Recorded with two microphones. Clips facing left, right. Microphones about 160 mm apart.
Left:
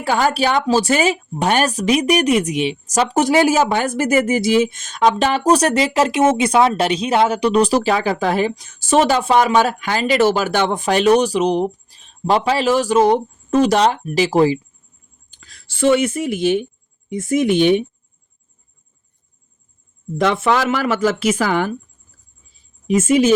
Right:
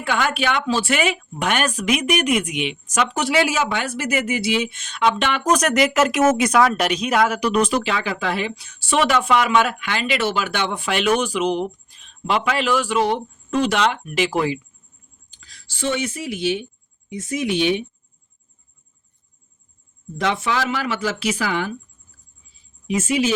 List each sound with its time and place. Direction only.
0.0 s speech: 35° left (ahead or behind)
15.3 s speech: 55° left (ahead or behind)
20.1 s speech: 50° left (ahead or behind)
22.9 s speech: 45° left (ahead or behind)